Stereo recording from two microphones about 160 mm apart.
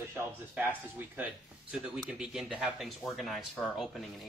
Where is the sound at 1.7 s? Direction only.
5° right (ahead or behind).